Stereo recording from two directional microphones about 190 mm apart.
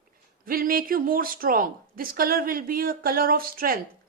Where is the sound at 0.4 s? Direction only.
50° right (ahead or behind).